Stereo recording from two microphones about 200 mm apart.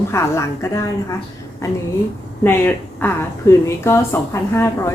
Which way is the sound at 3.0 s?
15° left (ahead or behind).